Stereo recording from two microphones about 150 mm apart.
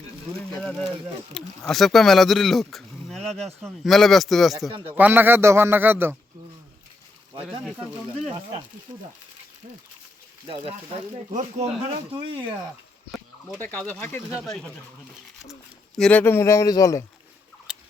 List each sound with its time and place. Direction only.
1.3 s speech: centre (ahead or behind)
4.9 s a man's voice: 10° right (ahead or behind)
10.5 s speech: 35° right (ahead or behind)
11.3 s speech: 55° right (ahead or behind)
12.1 s speech: 30° right (ahead or behind)
13.6 s speech: 10° left (ahead or behind)
14.3 s speech: centre (ahead or behind)
16.0 s speech: 10° left (ahead or behind)
17.7 s rodents: 5° right (ahead or behind)